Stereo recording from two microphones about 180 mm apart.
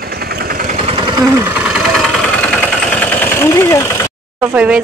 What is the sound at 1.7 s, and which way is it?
Vehicle, centre (ahead or behind).